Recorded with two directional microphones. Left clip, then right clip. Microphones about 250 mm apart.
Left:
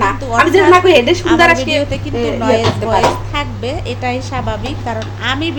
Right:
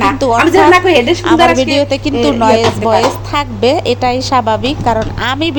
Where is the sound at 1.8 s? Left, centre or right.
Right.